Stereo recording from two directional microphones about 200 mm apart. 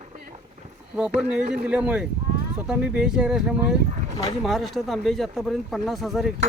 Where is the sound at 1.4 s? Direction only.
35° right (ahead or behind).